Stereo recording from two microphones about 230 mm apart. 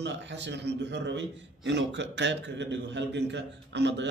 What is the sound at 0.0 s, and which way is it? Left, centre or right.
A man's voice, right.